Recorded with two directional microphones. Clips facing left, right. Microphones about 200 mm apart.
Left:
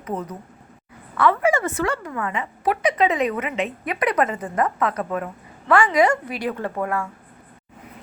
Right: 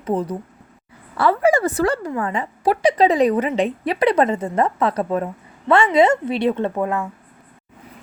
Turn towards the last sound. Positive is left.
turn(degrees=-20)  # may be behind; listen again after turning